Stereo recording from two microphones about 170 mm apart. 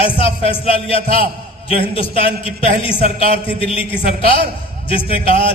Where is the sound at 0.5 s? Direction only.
35° left (ahead or behind).